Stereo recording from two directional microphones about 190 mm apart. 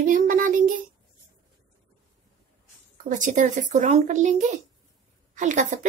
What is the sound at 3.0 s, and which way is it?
Speech, 40° right (ahead or behind).